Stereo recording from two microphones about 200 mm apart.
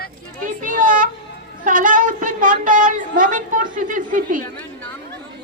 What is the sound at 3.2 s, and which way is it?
A woman's voice, 40° right (ahead or behind).